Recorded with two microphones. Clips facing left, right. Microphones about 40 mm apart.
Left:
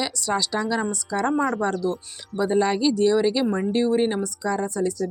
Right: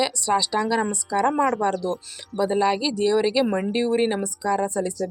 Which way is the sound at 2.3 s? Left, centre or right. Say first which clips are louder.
Even; centre.